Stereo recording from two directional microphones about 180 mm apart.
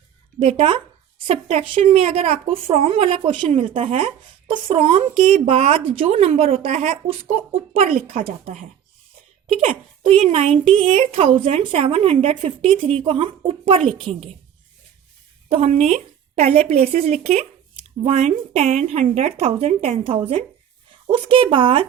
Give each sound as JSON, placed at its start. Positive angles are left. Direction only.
{"t": 0.3, "sound": "a woman's voice", "side_deg": -30}
{"t": 15.4, "sound": "a woman's voice", "side_deg": -35}